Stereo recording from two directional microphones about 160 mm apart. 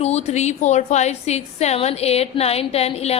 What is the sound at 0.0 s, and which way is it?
A woman's voice, 40° left (ahead or behind).